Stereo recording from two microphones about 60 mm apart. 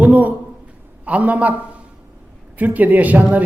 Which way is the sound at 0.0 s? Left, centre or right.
Right.